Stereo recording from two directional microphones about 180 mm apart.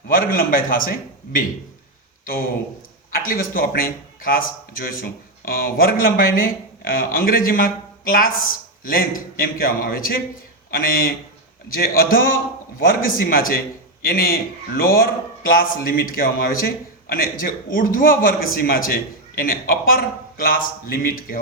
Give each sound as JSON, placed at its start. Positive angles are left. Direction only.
{"t": 0.1, "sound": "speech", "side_deg": 50}
{"t": 3.1, "sound": "a man's voice", "side_deg": 50}